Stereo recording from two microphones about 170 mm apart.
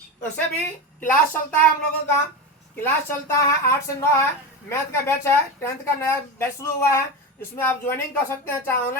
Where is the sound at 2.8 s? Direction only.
15° left (ahead or behind).